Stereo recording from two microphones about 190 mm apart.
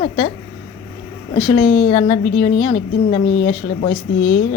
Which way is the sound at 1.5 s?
30° left (ahead or behind).